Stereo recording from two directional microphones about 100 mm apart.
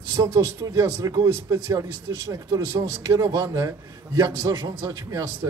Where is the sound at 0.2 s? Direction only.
30° right (ahead or behind).